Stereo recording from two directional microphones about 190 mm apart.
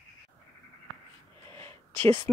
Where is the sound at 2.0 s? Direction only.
10° left (ahead or behind).